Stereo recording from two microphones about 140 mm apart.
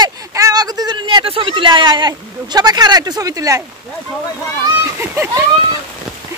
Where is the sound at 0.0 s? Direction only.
25° right (ahead or behind).